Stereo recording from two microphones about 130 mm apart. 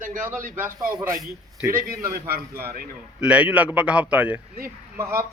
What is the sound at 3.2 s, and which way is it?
A man's voice, 10° right (ahead or behind).